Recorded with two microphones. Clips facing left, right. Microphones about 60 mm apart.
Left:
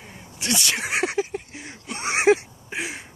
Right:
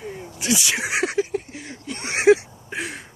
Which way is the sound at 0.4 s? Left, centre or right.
Centre.